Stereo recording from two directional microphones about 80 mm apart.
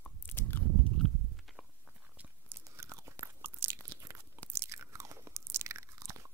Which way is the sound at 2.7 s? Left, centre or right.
Right.